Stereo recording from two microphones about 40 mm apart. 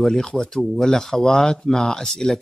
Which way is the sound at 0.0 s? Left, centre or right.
Centre.